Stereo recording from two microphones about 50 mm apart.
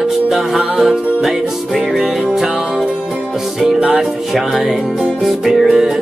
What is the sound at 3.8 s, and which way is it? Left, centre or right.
Music, centre.